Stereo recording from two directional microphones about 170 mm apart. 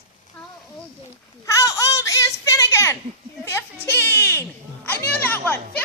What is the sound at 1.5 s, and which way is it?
A woman's voice, 20° left (ahead or behind).